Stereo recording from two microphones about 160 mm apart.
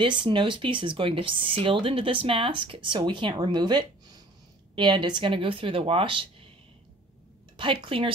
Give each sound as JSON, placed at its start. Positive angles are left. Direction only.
{"t": 0.0, "sound": "speech", "side_deg": -30}
{"t": 7.5, "sound": "speech", "side_deg": -30}